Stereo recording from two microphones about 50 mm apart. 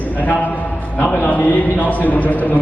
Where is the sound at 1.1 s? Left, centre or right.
Left.